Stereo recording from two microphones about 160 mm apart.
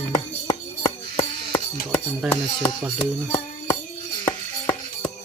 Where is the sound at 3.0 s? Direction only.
15° left (ahead or behind).